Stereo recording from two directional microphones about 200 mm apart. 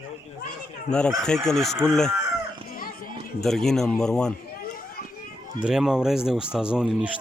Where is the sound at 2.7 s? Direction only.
45° left (ahead or behind).